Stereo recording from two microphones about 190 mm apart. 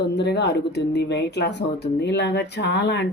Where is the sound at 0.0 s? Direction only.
65° left (ahead or behind).